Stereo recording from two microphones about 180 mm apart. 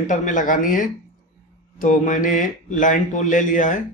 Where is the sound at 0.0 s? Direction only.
45° left (ahead or behind).